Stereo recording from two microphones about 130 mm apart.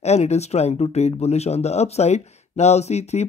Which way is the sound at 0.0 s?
60° left (ahead or behind).